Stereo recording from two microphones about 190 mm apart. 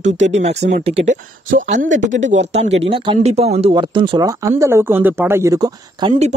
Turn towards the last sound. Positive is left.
turn(degrees=-20)  # may be behind; listen again after turning